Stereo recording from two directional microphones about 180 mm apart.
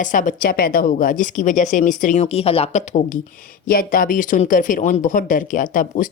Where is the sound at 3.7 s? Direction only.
55° left (ahead or behind).